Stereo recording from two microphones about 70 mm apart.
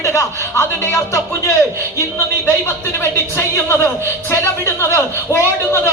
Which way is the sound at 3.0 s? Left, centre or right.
Left.